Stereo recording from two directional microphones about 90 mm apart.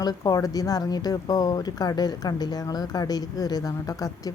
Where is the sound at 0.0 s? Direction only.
45° left (ahead or behind).